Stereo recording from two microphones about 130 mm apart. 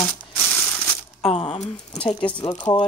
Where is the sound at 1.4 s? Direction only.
45° left (ahead or behind).